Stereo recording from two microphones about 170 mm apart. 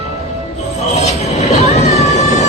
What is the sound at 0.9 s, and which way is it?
Train, 40° left (ahead or behind).